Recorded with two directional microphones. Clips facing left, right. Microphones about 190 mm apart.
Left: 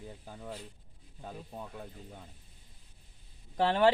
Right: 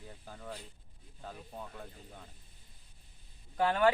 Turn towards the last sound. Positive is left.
turn(degrees=25)  # may be behind; listen again after turning